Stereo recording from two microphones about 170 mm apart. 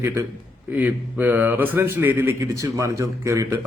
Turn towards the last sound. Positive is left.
turn(degrees=-15)  # may be behind; listen again after turning